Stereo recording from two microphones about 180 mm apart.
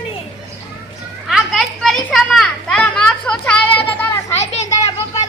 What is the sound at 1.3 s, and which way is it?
Children playing, centre (ahead or behind).